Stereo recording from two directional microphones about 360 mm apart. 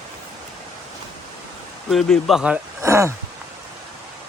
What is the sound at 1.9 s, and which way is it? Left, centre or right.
Speech, centre.